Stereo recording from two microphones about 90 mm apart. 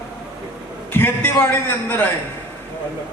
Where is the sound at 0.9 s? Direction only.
25° left (ahead or behind).